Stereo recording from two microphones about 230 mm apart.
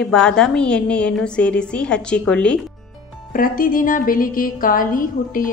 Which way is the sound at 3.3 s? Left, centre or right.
Left.